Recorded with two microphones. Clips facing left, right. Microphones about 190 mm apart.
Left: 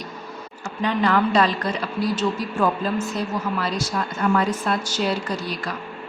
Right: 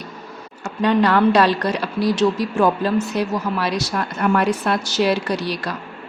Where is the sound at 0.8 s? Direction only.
70° right (ahead or behind).